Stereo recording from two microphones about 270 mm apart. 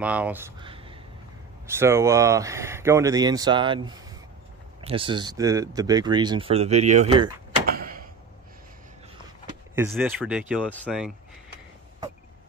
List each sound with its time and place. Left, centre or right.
0.0 s speech: centre
1.7 s speech: centre
7.6 s door: right
9.8 s speech: centre